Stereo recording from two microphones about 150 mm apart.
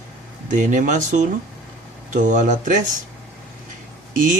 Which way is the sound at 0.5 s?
60° right (ahead or behind).